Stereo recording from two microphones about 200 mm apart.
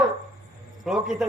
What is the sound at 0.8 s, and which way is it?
Speech, centre (ahead or behind).